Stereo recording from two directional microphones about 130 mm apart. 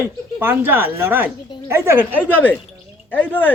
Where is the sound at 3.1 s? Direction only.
15° left (ahead or behind).